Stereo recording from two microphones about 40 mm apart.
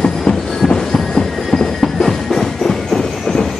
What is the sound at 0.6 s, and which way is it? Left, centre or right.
Thunder, centre.